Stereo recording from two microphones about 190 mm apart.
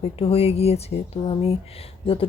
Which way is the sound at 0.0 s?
30° left (ahead or behind).